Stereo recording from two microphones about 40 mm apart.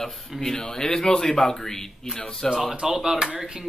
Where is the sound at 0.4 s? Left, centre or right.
Centre.